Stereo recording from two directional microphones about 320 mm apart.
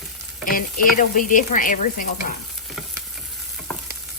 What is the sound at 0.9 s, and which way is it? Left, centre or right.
Speech, left.